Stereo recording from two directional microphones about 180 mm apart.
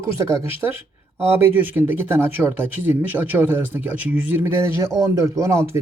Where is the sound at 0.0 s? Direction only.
15° right (ahead or behind).